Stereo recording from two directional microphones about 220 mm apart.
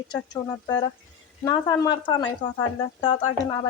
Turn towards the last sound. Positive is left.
turn(degrees=20)  # may be behind; listen again after turning